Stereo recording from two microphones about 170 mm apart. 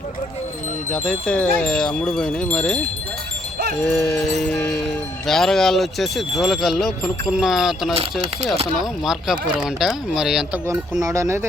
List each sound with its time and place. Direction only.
0.9 s speech: 5° left (ahead or behind)
9.0 s speech: 5° right (ahead or behind)
11.0 s speech: 20° right (ahead or behind)